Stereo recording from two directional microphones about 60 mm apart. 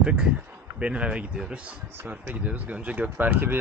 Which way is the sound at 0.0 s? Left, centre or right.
Centre.